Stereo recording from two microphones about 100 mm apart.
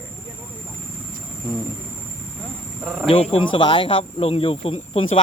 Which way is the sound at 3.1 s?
70° left (ahead or behind).